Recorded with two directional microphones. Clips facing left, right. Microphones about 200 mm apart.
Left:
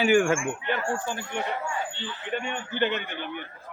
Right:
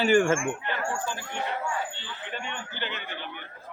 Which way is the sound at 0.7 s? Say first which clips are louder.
Left 3 dB; 55° left (ahead or behind).